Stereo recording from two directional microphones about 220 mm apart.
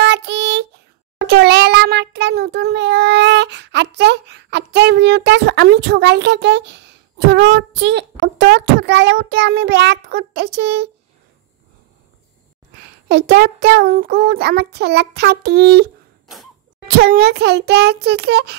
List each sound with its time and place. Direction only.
0.0 s child singing: 50° right (ahead or behind)
1.1 s a child's voice: 50° right (ahead or behind)
13.1 s child singing: 50° right (ahead or behind)